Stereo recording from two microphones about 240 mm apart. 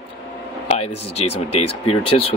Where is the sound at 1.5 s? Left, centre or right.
Left.